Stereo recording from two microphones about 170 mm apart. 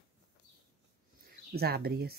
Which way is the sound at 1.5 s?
65° right (ahead or behind).